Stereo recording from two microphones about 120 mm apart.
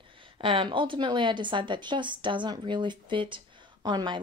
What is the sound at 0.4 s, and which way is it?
A woman's voice, 45° right (ahead or behind).